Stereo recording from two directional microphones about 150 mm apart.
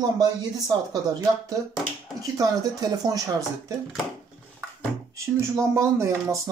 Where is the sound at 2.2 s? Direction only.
25° right (ahead or behind).